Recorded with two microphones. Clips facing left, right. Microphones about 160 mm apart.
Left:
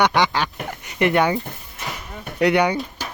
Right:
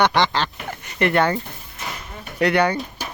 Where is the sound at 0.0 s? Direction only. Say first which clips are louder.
Even; 10° left (ahead or behind).